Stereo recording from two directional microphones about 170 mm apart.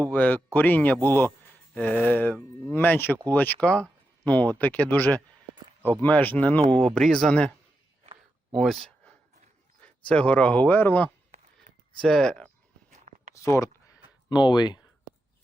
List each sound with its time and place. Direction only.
0.1 s speech: 10° left (ahead or behind)
8.5 s a sound: centre (ahead or behind)
10.1 s speech: 5° left (ahead or behind)
13.3 s speech: 20° left (ahead or behind)